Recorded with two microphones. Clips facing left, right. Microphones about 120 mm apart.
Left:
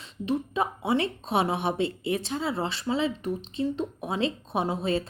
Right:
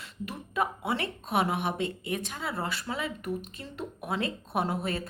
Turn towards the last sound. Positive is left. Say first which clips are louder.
# left 3 dB
turn(degrees=25)  # may be behind; listen again after turning